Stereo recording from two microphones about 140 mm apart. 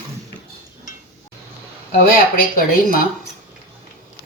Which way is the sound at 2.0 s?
85° left.